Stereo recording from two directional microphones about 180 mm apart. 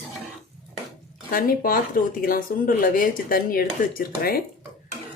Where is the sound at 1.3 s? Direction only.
50° left (ahead or behind).